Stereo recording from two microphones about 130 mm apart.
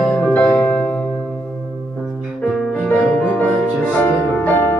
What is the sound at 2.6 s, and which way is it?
Music, 10° left (ahead or behind).